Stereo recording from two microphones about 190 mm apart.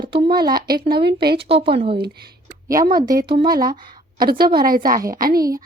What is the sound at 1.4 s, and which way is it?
Speech, 30° right (ahead or behind).